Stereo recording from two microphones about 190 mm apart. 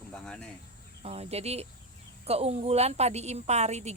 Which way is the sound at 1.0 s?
35° right (ahead or behind).